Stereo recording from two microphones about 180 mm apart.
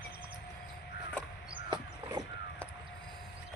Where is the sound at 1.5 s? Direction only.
25° right (ahead or behind).